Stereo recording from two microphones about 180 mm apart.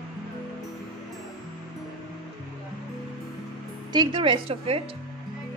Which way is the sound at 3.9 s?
25° right (ahead or behind).